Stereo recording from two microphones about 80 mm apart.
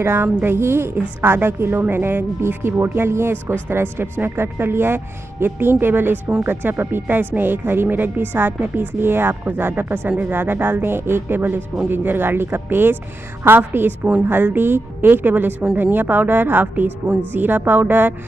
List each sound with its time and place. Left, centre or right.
0.0 s a woman's voice: right